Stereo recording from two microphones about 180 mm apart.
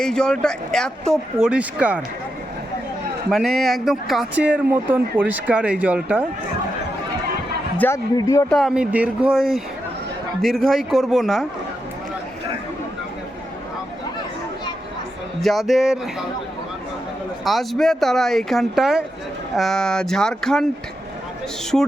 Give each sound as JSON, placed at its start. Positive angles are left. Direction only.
{"t": 0.0, "sound": "speech", "side_deg": 5}
{"t": 3.2, "sound": "speech", "side_deg": 0}
{"t": 7.8, "sound": "a man's voice", "side_deg": 15}
{"t": 8.4, "sound": "speech", "side_deg": 0}
{"t": 15.4, "sound": "speech", "side_deg": 0}
{"t": 17.4, "sound": "speech", "side_deg": 0}